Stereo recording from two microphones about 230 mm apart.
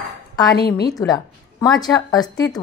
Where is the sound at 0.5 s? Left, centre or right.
Left.